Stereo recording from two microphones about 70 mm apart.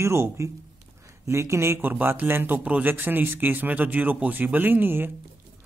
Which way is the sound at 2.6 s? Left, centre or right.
Right.